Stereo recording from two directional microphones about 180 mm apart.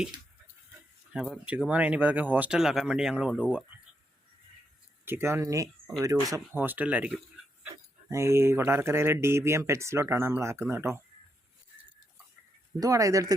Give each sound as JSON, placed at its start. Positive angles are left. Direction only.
{"t": 1.1, "sound": "speech", "side_deg": -5}
{"t": 5.0, "sound": "speech", "side_deg": -15}
{"t": 12.8, "sound": "speech", "side_deg": -20}